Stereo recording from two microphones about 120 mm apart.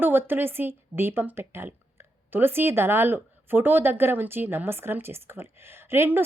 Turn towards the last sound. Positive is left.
turn(degrees=-20)  # may be behind; listen again after turning